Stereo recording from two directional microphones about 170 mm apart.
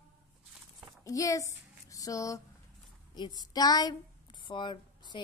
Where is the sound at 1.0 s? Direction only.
20° left (ahead or behind).